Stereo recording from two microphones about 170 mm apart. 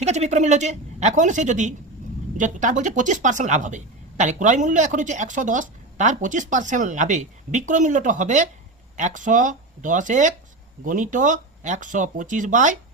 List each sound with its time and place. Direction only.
0.0 s a woman's voice: 40° right (ahead or behind)